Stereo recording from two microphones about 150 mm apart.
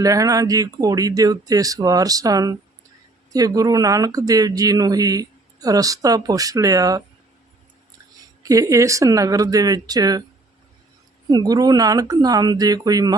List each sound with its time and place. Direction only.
0.0 s speech: 25° right (ahead or behind)
8.4 s speech: 20° right (ahead or behind)
11.3 s speech: 25° right (ahead or behind)